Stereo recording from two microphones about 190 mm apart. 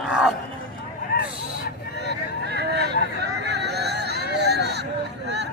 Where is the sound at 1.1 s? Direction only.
55° left (ahead or behind).